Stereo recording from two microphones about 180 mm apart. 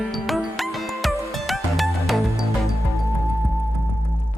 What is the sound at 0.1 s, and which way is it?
Music, centre (ahead or behind).